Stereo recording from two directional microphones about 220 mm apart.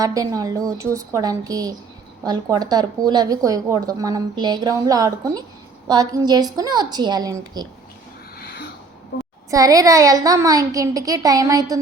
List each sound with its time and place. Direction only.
0.0 s a woman's voice: 15° right (ahead or behind)
8.4 s a sound: 50° left (ahead or behind)
9.5 s a woman's voice: 15° right (ahead or behind)